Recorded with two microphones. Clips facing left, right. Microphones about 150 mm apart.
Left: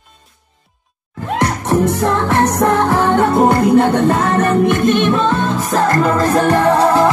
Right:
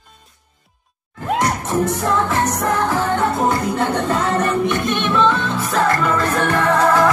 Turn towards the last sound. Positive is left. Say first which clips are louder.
# left 3 dB
turn(degrees=30)  # may be behind; listen again after turning